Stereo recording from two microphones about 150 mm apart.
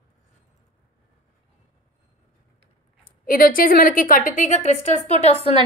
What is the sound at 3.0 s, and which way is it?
A woman's voice, 70° left (ahead or behind).